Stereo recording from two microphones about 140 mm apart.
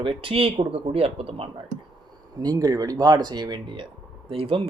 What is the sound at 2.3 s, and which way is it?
Speech, 25° right (ahead or behind).